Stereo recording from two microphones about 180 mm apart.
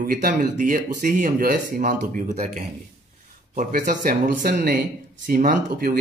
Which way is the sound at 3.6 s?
45° right (ahead or behind).